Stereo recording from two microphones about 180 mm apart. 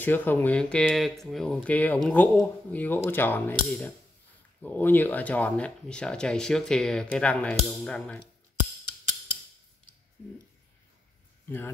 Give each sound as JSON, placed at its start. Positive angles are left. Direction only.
{"t": 0.0, "sound": "speech", "side_deg": 10}
{"t": 11.4, "sound": "speech", "side_deg": 10}